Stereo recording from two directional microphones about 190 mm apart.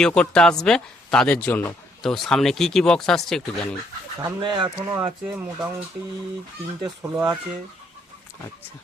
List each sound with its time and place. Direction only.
0.0 s speech: 5° left (ahead or behind)
4.2 s speech: 25° right (ahead or behind)
6.8 s speech: 20° right (ahead or behind)